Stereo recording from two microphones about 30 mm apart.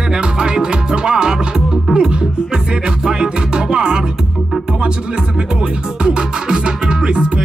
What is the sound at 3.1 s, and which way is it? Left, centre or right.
Music, right.